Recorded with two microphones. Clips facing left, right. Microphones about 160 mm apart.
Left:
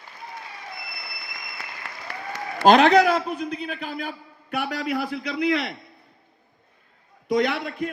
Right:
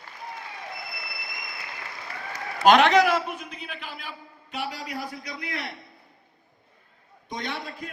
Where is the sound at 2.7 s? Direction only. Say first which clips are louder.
Left 2 dB; 35° left (ahead or behind).